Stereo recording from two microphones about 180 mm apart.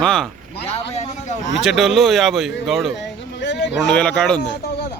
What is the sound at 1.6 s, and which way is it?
Speech, centre (ahead or behind).